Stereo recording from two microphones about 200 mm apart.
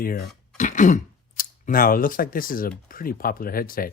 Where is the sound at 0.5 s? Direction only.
40° left (ahead or behind).